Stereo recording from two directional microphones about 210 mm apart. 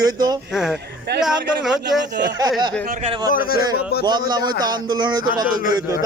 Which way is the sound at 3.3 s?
45° left (ahead or behind).